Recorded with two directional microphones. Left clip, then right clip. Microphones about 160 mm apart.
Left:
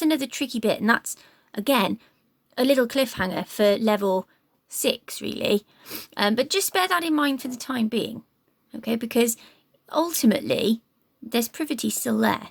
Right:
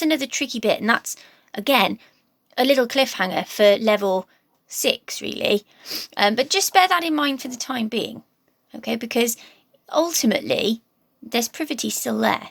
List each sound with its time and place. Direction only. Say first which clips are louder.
0.0 s a woman's voice: right 2 dB; 45° left (ahead or behind)